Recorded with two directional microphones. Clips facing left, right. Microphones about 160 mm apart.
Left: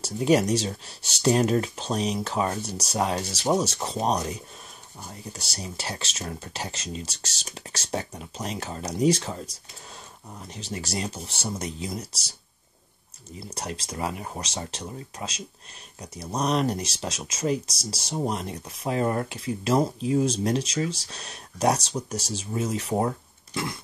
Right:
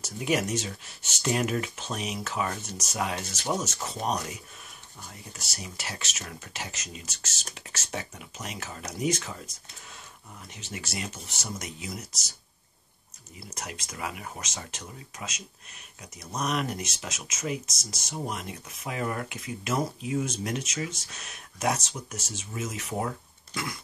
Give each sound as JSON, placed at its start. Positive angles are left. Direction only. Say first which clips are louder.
{"t": 0.0, "sound": "speech", "louder": "left 7 dB", "side_deg": 35}
{"t": 13.6, "sound": "speech", "louder": "left 6 dB", "side_deg": 30}